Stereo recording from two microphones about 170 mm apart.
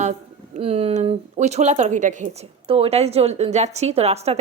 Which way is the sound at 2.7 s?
35° right (ahead or behind).